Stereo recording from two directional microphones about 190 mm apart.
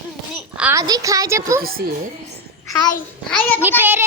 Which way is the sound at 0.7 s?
20° right (ahead or behind).